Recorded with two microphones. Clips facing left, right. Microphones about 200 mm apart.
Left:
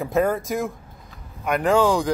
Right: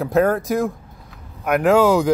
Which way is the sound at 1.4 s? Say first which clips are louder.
Right 4 dB; 5° right (ahead or behind).